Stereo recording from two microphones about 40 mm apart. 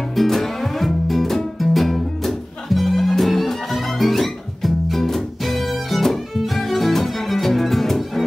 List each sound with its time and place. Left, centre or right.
0.1 s music: centre